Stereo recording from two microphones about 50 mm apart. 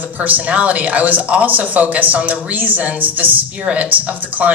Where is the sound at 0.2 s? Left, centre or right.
Right.